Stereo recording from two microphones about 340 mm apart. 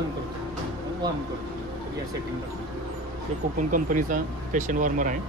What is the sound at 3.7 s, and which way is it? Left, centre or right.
Speech, right.